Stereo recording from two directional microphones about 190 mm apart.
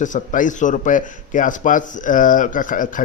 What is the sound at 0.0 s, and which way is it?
A man's voice, 40° left (ahead or behind).